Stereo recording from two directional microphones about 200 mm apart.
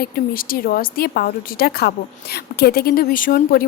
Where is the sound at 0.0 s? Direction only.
50° left (ahead or behind).